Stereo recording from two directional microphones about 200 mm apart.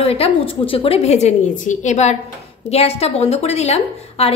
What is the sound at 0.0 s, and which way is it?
A woman's voice, 30° left (ahead or behind).